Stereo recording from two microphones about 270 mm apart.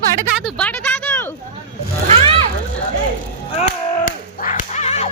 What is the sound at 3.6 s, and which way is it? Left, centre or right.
Whip, left.